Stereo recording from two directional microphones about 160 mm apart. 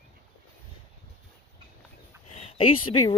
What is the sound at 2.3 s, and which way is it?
Speech, 35° left (ahead or behind).